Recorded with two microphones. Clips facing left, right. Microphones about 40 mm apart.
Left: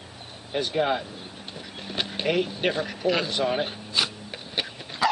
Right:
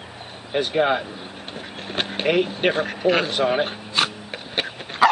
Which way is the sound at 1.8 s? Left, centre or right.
Right.